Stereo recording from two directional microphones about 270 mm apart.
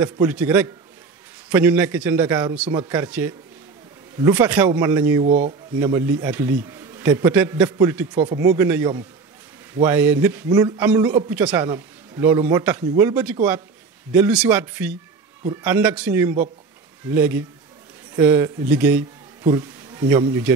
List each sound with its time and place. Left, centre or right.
0.0 s speech: centre
2.6 s speech: right
2.9 s speech: centre